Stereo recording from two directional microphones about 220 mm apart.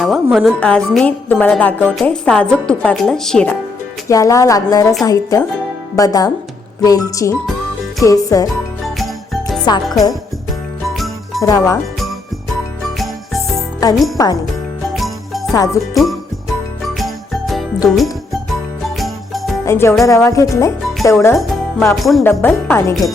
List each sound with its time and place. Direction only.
0.0 s a woman's voice: centre (ahead or behind)
4.1 s music: 15° left (ahead or behind)
9.0 s jingle: centre (ahead or behind)
10.8 s jingle bell: centre (ahead or behind)
11.4 s music: 15° left (ahead or behind)
13.0 s music: centre (ahead or behind)
13.8 s music: 15° left (ahead or behind)
14.9 s jingle bell: centre (ahead or behind)
15.5 s music: 15° left (ahead or behind)
16.8 s jingle: centre (ahead or behind)
17.8 s a woman's voice: centre (ahead or behind)
18.9 s jingle bell: centre (ahead or behind)
19.6 s music: 10° left (ahead or behind)
21.9 s music: centre (ahead or behind)